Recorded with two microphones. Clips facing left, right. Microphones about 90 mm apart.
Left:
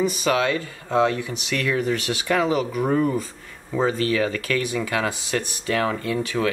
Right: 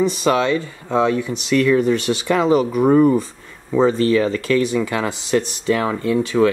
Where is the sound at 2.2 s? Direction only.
25° right (ahead or behind).